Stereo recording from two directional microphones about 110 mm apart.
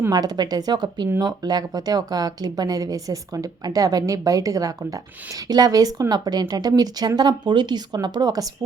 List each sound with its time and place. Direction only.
0.1 s speech: 35° right (ahead or behind)